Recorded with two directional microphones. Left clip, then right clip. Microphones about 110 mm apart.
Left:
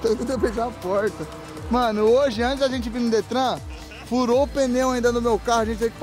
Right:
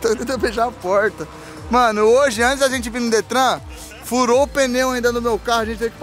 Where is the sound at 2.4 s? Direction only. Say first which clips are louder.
Right 7 dB; 35° left (ahead or behind).